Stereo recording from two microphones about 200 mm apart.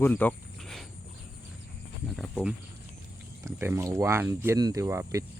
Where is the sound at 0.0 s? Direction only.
10° left (ahead or behind).